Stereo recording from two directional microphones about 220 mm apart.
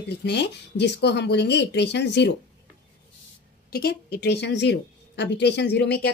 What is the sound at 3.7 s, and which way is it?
A woman's voice, 45° left (ahead or behind).